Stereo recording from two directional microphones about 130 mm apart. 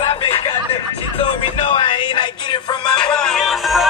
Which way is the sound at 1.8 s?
40° left (ahead or behind).